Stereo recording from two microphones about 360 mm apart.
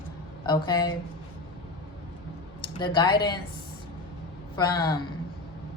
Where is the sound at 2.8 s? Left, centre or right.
Centre.